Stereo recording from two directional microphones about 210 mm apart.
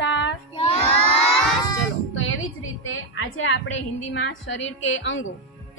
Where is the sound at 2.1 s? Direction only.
70° left (ahead or behind).